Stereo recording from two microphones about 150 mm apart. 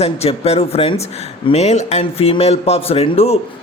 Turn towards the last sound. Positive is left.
turn(degrees=40)  # may be behind; listen again after turning